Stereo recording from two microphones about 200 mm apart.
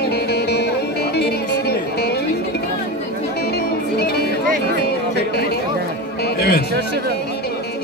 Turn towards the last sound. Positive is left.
turn(degrees=50)  # may be behind; listen again after turning